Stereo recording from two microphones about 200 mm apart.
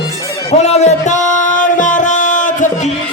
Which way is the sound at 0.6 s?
35° left (ahead or behind).